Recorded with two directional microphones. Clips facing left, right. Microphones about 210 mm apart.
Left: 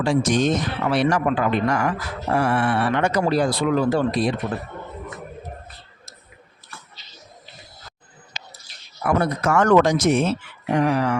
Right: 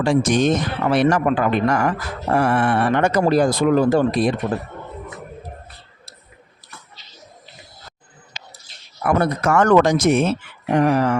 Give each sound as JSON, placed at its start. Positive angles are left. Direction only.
{"t": 0.0, "sound": "speech", "side_deg": -55}
{"t": 9.0, "sound": "speech", "side_deg": -55}
{"t": 10.8, "sound": "speech", "side_deg": -50}